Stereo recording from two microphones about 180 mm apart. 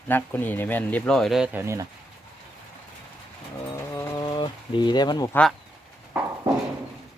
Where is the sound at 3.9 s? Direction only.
20° left (ahead or behind).